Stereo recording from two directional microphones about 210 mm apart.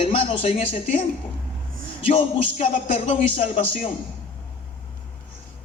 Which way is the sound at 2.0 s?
25° left (ahead or behind).